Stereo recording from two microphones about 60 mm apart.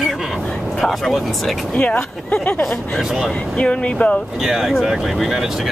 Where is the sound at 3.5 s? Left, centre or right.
Centre.